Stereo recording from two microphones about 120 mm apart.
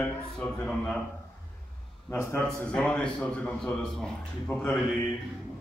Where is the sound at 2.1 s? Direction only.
20° left (ahead or behind).